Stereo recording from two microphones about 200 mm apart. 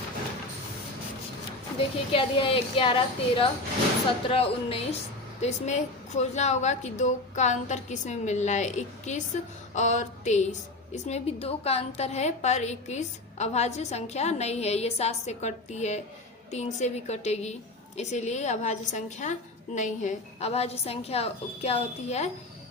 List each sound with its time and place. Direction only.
2.1 s a woman's voice: 25° left (ahead or behind)